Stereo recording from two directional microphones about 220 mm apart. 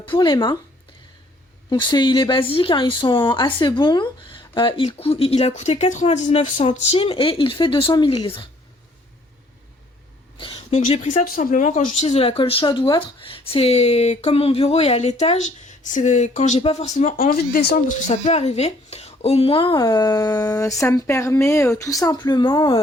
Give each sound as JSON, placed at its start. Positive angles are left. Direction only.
{"t": 0.0, "sound": "a woman's voice", "side_deg": 20}
{"t": 1.7, "sound": "a woman's voice", "side_deg": 20}
{"t": 10.3, "sound": "a woman's voice", "side_deg": 25}